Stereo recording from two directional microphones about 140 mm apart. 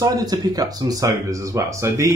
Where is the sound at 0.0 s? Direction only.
25° right (ahead or behind).